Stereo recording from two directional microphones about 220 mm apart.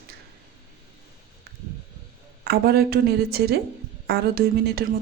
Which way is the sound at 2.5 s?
45° right (ahead or behind).